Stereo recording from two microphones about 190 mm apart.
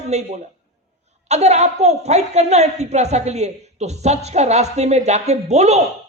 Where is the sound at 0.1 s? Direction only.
35° right (ahead or behind).